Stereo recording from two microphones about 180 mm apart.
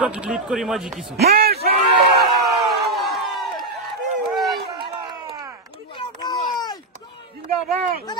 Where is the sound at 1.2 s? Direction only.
60° right (ahead or behind).